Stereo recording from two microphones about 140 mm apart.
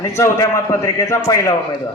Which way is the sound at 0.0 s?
20° left (ahead or behind).